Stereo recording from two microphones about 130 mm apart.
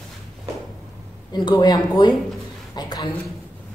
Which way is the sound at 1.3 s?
35° left (ahead or behind).